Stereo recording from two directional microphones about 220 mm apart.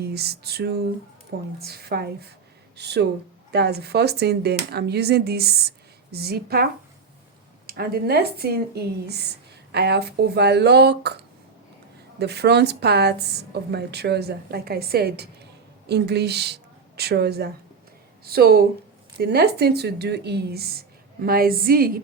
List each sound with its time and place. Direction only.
0.0 s a woman's voice: 45° right (ahead or behind)
7.7 s a woman's voice: 45° right (ahead or behind)
12.2 s a woman's voice: 50° right (ahead or behind)